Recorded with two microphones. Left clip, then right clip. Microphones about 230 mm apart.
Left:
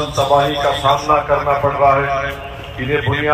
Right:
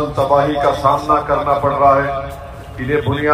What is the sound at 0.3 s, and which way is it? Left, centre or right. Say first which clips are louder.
A man's voice: even; left.